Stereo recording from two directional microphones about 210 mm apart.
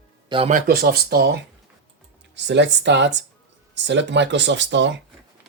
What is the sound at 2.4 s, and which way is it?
Speech, 55° right (ahead or behind).